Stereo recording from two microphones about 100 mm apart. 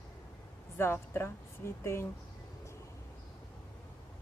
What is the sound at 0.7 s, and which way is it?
A woman's voice, 25° left (ahead or behind).